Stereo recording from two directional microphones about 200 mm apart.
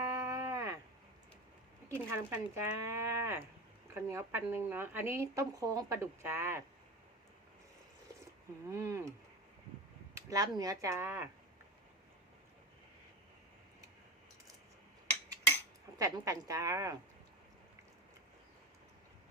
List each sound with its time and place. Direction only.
0.0 s a sound: 15° right (ahead or behind)
2.0 s speech: 15° right (ahead or behind)
8.7 s speech: 15° right (ahead or behind)
10.2 s a sound: 15° right (ahead or behind)
10.6 s speech: 15° right (ahead or behind)
16.0 s speech: 15° right (ahead or behind)